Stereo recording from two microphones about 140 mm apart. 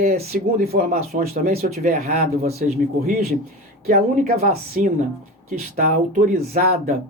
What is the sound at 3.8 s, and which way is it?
Speech, 70° right (ahead or behind).